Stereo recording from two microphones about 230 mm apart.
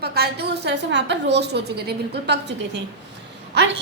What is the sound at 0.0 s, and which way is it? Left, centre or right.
A woman's voice, right.